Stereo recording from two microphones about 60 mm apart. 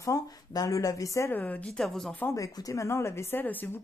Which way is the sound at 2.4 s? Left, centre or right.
Left.